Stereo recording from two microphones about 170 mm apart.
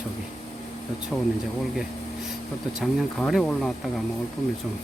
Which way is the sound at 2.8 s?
Centre (ahead or behind).